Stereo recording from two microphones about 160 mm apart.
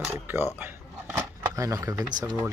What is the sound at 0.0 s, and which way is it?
Speech, 15° right (ahead or behind).